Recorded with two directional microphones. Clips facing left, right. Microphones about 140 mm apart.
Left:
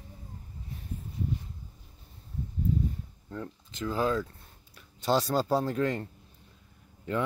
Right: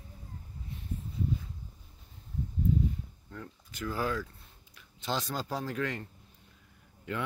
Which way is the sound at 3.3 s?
25° left (ahead or behind).